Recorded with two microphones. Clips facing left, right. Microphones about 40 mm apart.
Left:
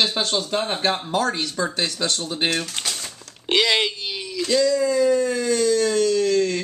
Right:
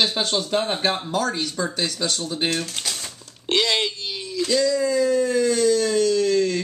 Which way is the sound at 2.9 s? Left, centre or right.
Centre.